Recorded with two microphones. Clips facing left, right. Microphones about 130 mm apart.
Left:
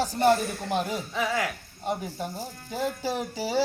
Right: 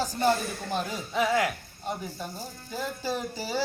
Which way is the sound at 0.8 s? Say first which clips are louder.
Left 4 dB; 20° left (ahead or behind).